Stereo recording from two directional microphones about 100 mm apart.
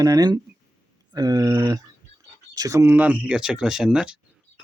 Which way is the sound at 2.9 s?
15° right (ahead or behind).